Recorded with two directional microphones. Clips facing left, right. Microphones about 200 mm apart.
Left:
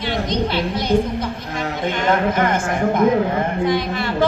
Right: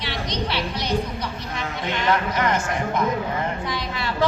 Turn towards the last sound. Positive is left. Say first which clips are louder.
# left 5 dB
turn(degrees=50)  # may be behind; listen again after turning